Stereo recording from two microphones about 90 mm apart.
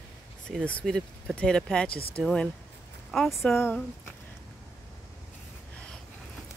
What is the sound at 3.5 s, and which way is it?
Speech, 20° left (ahead or behind).